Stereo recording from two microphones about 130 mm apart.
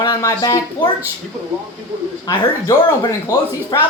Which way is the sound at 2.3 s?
30° left (ahead or behind).